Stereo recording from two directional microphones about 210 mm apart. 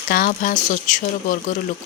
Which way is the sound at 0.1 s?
40° left (ahead or behind).